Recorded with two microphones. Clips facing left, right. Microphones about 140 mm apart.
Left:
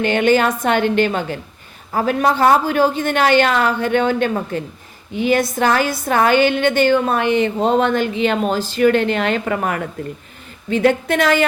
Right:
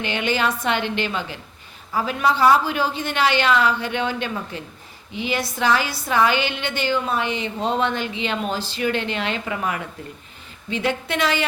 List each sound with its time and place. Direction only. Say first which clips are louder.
0.0 s a woman's voice: left 8 dB; 50° left (ahead or behind)